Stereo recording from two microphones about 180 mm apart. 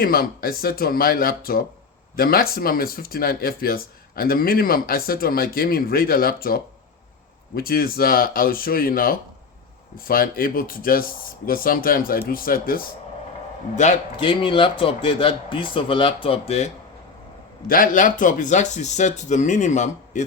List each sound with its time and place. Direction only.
0.0 s speech: 55° left (ahead or behind)
13.7 s speech: 40° left (ahead or behind)
14.2 s a man's voice: 25° left (ahead or behind)
17.7 s speech: 50° left (ahead or behind)